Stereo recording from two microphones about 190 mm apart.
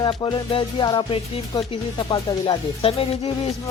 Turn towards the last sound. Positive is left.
turn(degrees=30)  # may be behind; listen again after turning